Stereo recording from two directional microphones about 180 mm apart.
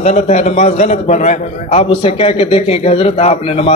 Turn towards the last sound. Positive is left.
turn(degrees=35)  # may be behind; listen again after turning